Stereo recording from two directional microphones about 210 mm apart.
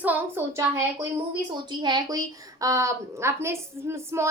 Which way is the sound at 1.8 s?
20° right (ahead or behind).